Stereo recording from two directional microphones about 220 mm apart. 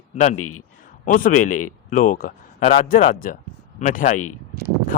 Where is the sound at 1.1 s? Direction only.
35° left (ahead or behind).